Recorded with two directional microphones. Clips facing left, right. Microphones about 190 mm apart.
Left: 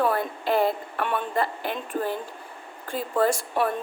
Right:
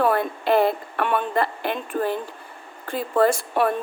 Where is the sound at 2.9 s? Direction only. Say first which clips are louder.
Right 4 dB; 65° right (ahead or behind).